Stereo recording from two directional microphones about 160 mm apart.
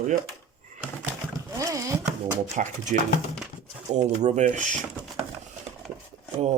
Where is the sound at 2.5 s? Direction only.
50° right (ahead or behind).